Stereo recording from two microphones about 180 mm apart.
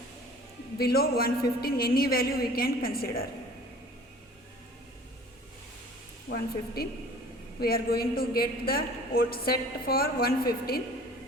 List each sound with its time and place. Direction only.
0.8 s a man's voice: 60° left (ahead or behind)
6.2 s a man's voice: 60° left (ahead or behind)